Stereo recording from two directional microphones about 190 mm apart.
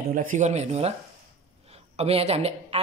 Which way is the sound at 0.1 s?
45° right (ahead or behind).